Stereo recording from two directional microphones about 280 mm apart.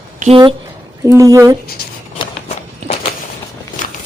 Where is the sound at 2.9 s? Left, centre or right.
Left.